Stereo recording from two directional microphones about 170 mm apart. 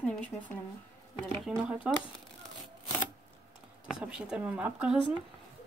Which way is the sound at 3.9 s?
5° right (ahead or behind).